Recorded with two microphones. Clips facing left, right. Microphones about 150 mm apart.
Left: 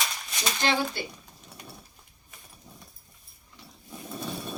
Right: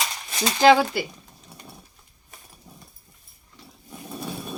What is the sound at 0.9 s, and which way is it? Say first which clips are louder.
Speech: right 7 dB; 90° right.